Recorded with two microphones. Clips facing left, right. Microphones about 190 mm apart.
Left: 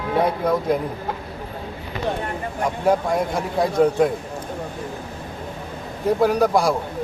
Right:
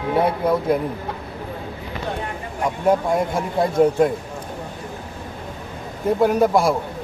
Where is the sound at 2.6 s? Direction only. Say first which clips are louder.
Right 1 dB; centre (ahead or behind).